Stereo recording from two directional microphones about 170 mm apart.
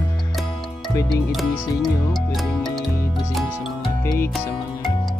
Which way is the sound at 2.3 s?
Centre (ahead or behind).